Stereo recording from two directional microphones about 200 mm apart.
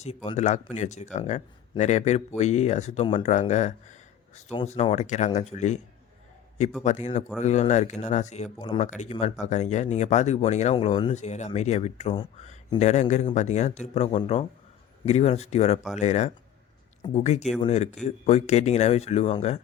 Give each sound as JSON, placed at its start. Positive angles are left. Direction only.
{"t": 0.0, "sound": "speech", "side_deg": 30}
{"t": 6.8, "sound": "speech", "side_deg": 35}
{"t": 8.5, "sound": "speech", "side_deg": 25}
{"t": 8.9, "sound": "speech", "side_deg": 35}